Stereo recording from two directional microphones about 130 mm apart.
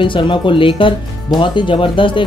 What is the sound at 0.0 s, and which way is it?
Speech, 40° left (ahead or behind).